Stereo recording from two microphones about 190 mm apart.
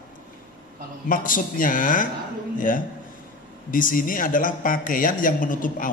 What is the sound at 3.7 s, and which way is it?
A man's voice, 45° left (ahead or behind).